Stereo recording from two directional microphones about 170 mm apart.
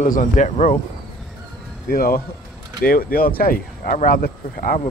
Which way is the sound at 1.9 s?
60° left (ahead or behind).